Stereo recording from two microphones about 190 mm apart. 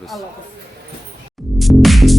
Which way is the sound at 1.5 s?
Centre (ahead or behind).